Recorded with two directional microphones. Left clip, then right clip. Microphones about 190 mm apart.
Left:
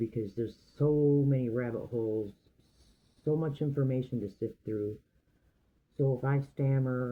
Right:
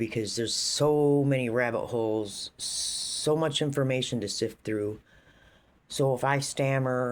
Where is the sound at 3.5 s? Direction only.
90° right.